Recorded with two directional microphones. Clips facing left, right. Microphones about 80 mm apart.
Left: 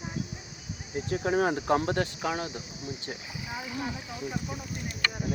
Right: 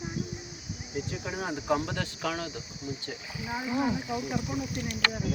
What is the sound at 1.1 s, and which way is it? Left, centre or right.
Speech, left.